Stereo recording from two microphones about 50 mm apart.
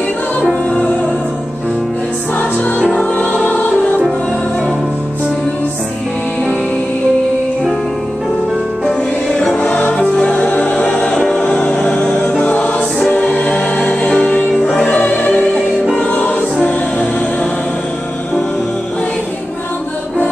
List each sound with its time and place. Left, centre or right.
2.3 s music: left
2.8 s music: centre
8.8 s music: centre
12.4 s choir: left
13.3 s music: left
14.6 s music: centre
14.9 s music: left